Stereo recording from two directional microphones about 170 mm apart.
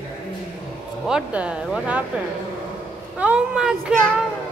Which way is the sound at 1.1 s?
5° right (ahead or behind).